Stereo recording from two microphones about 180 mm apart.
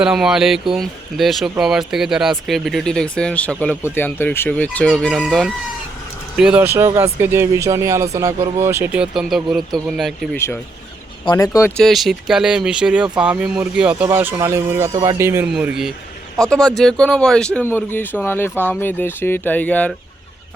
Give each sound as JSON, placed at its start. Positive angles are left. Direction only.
{"t": 0.0, "sound": "speech", "side_deg": -5}
{"t": 10.3, "sound": "speech", "side_deg": 15}
{"t": 11.3, "sound": "speech", "side_deg": 25}
{"t": 11.8, "sound": "speech", "side_deg": 0}